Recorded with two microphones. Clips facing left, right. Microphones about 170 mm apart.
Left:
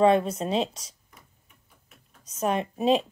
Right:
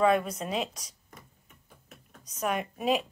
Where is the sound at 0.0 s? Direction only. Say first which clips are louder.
Left 4 dB; 30° left (ahead or behind).